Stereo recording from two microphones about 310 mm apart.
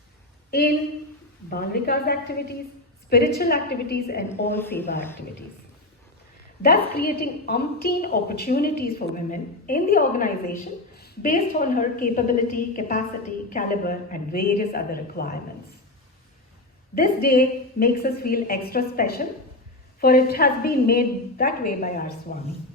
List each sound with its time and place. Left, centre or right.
1.5 s a woman's voice: left
4.3 s speech: centre
6.6 s a woman's voice: left
16.9 s a woman's voice: left